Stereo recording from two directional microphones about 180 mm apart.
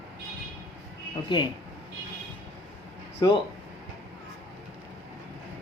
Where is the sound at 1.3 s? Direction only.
25° left (ahead or behind).